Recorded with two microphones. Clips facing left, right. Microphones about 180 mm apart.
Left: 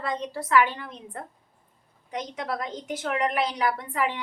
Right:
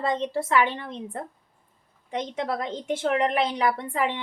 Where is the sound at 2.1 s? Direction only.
25° right (ahead or behind).